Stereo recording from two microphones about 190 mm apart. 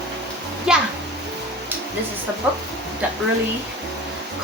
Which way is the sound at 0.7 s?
5° right (ahead or behind).